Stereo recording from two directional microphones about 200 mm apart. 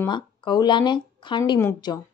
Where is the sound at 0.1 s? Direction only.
20° left (ahead or behind).